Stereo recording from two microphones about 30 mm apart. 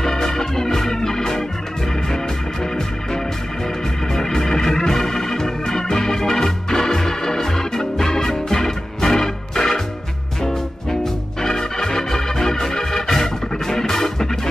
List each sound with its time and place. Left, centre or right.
0.0 s organ: centre
10.4 s music: centre
11.4 s organ: centre